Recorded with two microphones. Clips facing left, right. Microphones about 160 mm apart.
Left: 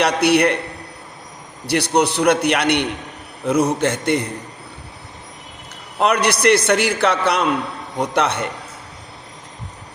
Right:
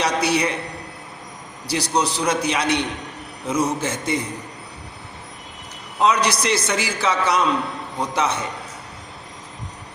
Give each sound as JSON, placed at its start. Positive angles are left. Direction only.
{"t": 0.0, "sound": "a man's voice", "side_deg": 65}
{"t": 1.6, "sound": "a man's voice", "side_deg": 65}
{"t": 6.0, "sound": "a man's voice", "side_deg": 60}